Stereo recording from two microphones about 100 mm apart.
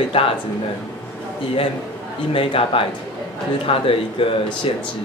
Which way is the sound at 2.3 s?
65° left (ahead or behind).